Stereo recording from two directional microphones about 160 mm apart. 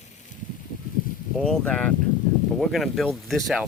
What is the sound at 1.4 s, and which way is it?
Speech, 5° left (ahead or behind).